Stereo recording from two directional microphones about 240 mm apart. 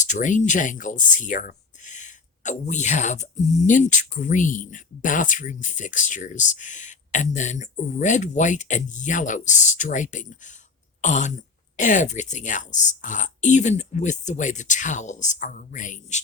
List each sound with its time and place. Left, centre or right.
0.0 s speech: left
11.0 s throat clearing: left
11.8 s speech: left